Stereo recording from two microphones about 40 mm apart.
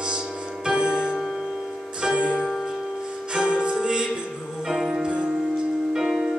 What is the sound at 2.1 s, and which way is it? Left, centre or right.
Music, right.